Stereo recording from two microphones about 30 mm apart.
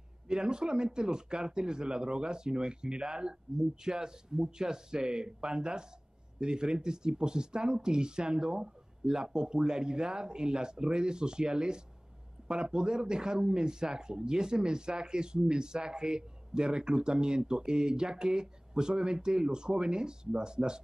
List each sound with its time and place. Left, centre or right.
0.3 s speech: right